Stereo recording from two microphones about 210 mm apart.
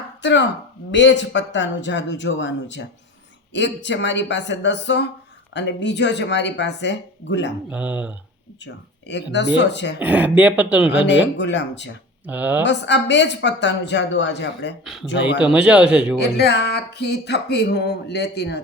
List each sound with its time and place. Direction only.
0.2 s a woman's voice: 60° left (ahead or behind)
7.7 s a man's voice: 5° right (ahead or behind)
8.6 s a woman's voice: 55° left (ahead or behind)
10.0 s speech: 5° right (ahead or behind)
10.9 s a woman's voice: 55° left (ahead or behind)
12.2 s speech: 5° right (ahead or behind)
12.6 s a woman's voice: 55° left (ahead or behind)
15.4 s a man's voice: 5° right (ahead or behind)
16.2 s speech: 50° left (ahead or behind)